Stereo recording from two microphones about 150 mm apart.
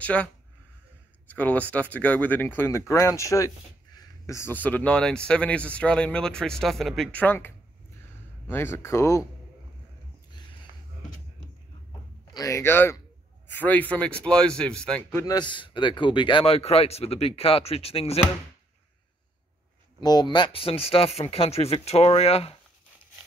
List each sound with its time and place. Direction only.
0.0 s speech: 10° left (ahead or behind)
12.4 s speech: 20° left (ahead or behind)
15.1 s a man's voice: 25° left (ahead or behind); by 18.2 s 40° left (ahead or behind)
20.0 s a man's voice: 25° left (ahead or behind)